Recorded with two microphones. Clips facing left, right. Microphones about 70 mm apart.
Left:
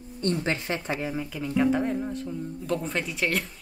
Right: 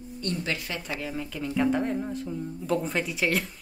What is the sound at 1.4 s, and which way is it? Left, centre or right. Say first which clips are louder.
Speech: left 1 dB; centre.